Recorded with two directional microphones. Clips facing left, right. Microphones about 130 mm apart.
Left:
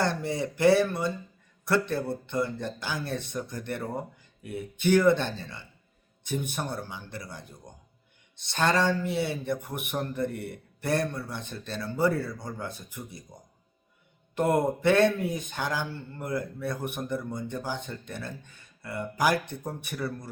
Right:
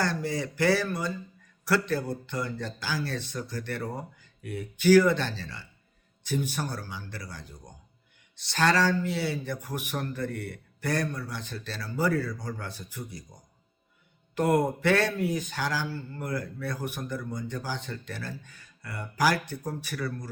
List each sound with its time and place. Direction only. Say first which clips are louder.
0.2 s speech: left 3 dB; 25° left (ahead or behind)
4.4 s speech: right 4 dB; 20° left (ahead or behind)
8.4 s speech: right 1 dB; 25° left (ahead or behind)
14.3 s speech: even; 25° left (ahead or behind)